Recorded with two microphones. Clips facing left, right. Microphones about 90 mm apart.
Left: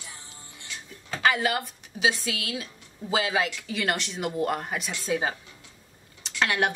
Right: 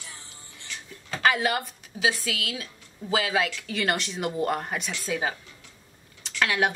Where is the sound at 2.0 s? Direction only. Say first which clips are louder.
Even; 25° left (ahead or behind).